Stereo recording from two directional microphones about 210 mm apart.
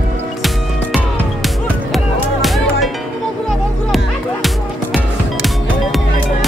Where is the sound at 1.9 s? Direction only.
Centre (ahead or behind).